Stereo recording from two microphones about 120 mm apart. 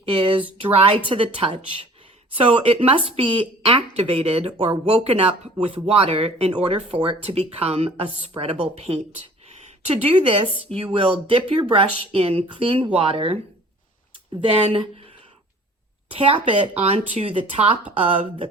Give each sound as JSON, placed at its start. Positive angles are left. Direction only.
{"t": 0.0, "sound": "speech", "side_deg": -50}
{"t": 16.0, "sound": "speech", "side_deg": -50}